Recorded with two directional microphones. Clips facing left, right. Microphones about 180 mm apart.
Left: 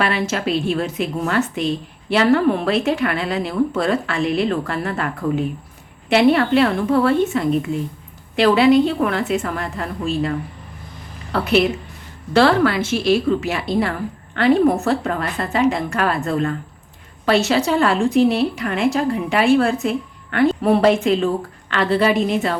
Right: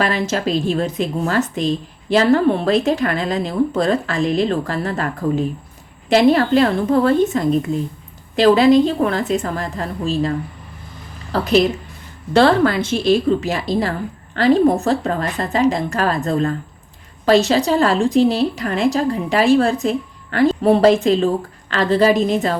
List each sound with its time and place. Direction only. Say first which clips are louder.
0.0 s a woman's voice: right 1 dB; 35° right (ahead or behind)